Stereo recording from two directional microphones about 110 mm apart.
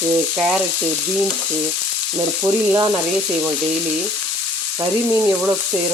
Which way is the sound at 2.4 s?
25° right (ahead or behind).